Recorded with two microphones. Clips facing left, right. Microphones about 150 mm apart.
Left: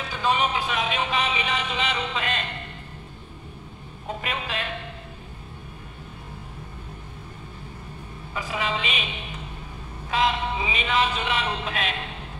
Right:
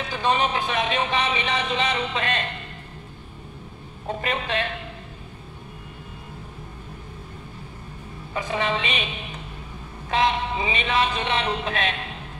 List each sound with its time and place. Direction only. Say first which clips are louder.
0.1 s music: right 1 dB; 35° right (ahead or behind)
4.2 s a man's voice: right 5 dB; 35° right (ahead or behind)
8.4 s a man's voice: right 3 dB; 35° right (ahead or behind)
10.1 s a man's voice: right 2 dB; 35° right (ahead or behind)